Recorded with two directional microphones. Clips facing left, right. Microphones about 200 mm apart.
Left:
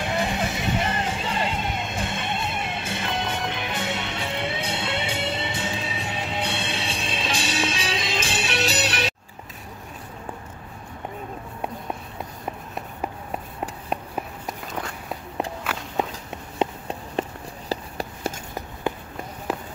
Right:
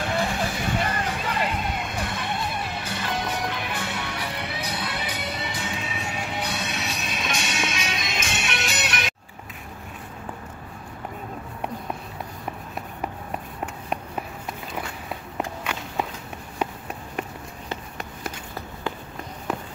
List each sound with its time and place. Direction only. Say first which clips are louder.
0.0 s music: even; 20° left (ahead or behind)
15.7 s walk: left 1 dB; 5° left (ahead or behind)
16.5 s a sound: left 4 dB; 30° left (ahead or behind)